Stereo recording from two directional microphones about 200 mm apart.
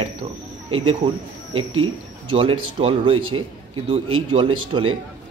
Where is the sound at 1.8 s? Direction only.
25° right (ahead or behind).